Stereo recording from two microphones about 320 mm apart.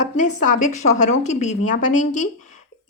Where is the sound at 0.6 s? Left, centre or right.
Left.